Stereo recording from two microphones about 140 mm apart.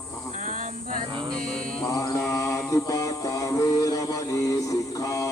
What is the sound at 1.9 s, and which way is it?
Mantra, 25° left (ahead or behind).